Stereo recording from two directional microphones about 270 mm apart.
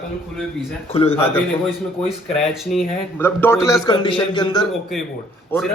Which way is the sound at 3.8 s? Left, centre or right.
Centre.